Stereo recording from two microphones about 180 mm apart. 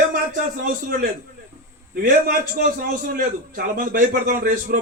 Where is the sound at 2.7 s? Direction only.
50° right (ahead or behind).